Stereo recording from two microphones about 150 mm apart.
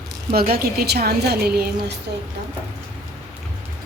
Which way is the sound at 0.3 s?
90° right.